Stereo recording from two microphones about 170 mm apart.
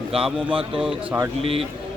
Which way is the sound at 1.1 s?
15° right (ahead or behind).